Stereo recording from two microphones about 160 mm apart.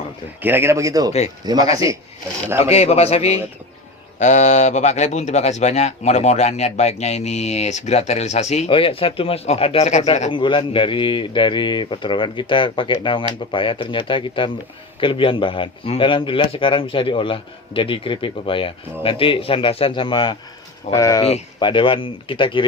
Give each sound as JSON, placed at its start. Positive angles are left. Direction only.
{"t": 0.4, "sound": "speech", "side_deg": -15}
{"t": 2.6, "sound": "a man's voice", "side_deg": 40}
{"t": 10.3, "sound": "a man's voice", "side_deg": 30}
{"t": 21.2, "sound": "a man's voice", "side_deg": 35}